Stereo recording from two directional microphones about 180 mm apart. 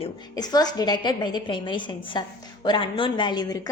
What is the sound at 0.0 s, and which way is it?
A woman's voice, 20° left (ahead or behind).